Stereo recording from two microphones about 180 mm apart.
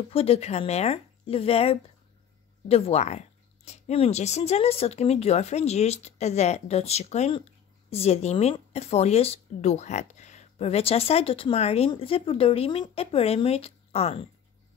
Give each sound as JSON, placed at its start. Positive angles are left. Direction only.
{"t": 0.1, "sound": "speech", "side_deg": 35}